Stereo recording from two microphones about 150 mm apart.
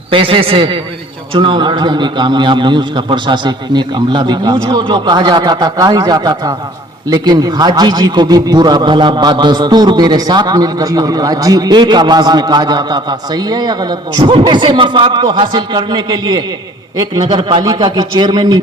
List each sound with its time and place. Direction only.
0.1 s a man's voice: 35° right (ahead or behind)